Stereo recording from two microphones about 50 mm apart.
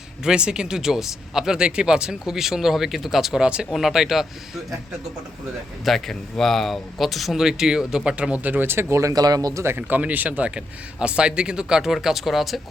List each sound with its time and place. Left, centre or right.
0.3 s speech: centre
3.4 s speech: right
3.7 s speech: centre
5.8 s speech: centre
8.6 s speech: right
8.9 s speech: right
9.6 s speech: right
10.0 s speech: right; by 12.5 s centre